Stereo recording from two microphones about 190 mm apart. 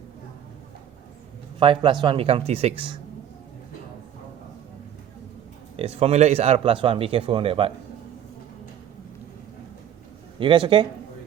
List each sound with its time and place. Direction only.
1.5 s speech: 25° right (ahead or behind)
5.7 s speech: 30° right (ahead or behind)
10.4 s speech: 25° right (ahead or behind)